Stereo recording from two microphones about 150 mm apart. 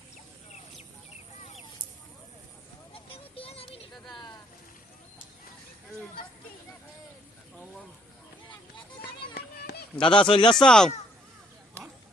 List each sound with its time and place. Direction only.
2.9 s a sound: 40° left (ahead or behind)
3.9 s vehicle: centre (ahead or behind)
9.0 s children playing: 90° left
10.0 s speech: 35° left (ahead or behind)
10.5 s speech: 5° left (ahead or behind)